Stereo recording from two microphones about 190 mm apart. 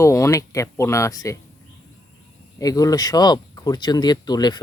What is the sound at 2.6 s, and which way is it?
Speech, 20° left (ahead or behind).